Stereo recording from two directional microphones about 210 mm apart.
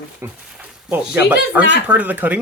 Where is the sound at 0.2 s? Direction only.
10° right (ahead or behind).